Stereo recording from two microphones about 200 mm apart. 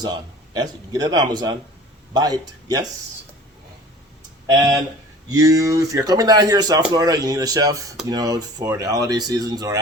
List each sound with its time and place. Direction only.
0.0 s speech: 20° right (ahead or behind)
5.4 s speech: 15° right (ahead or behind)